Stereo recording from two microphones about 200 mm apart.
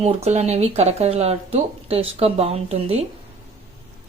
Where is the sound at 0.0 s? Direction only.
35° right (ahead or behind).